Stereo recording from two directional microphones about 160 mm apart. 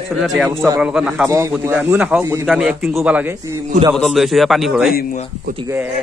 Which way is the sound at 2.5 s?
Centre (ahead or behind).